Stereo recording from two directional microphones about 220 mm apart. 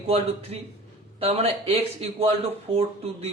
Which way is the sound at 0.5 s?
30° right (ahead or behind).